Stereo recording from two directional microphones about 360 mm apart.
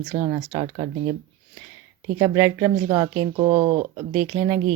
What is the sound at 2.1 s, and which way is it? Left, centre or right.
Speech, centre.